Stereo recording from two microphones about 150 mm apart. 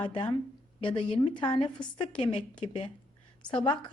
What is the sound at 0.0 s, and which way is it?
A woman's voice, 30° left (ahead or behind).